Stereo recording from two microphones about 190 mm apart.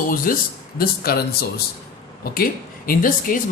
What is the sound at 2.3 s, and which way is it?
Speech, 50° left (ahead or behind).